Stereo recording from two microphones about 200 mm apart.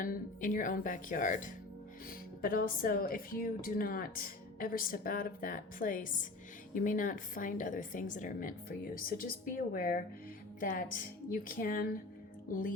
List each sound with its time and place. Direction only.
0.0 s a woman's voice: 40° left (ahead or behind)